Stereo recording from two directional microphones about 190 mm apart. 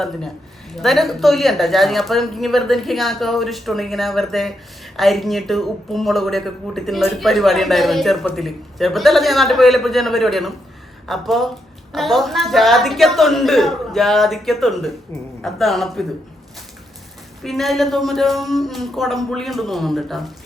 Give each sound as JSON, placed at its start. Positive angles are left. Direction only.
{"t": 0.7, "sound": "a woman's voice", "side_deg": 0}
{"t": 17.4, "sound": "a woman's voice", "side_deg": 0}